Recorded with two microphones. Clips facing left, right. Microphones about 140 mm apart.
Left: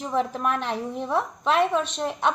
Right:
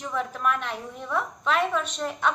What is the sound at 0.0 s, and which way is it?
A woman's voice, 35° left (ahead or behind).